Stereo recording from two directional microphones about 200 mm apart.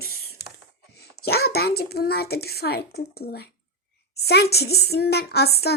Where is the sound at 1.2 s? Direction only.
50° left (ahead or behind).